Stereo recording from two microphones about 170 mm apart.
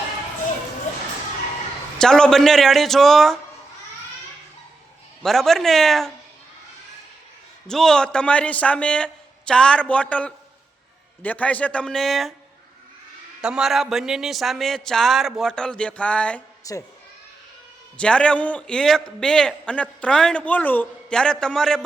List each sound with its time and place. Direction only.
2.0 s a man's voice: 5° left (ahead or behind)
5.2 s a man's voice: centre (ahead or behind)
7.7 s speech: 5° left (ahead or behind)
13.4 s a man's voice: 5° right (ahead or behind)
16.7 s speech: 20° left (ahead or behind)
17.9 s a man's voice: 5° left (ahead or behind)